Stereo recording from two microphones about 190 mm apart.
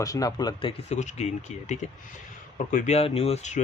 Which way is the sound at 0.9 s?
35° left (ahead or behind).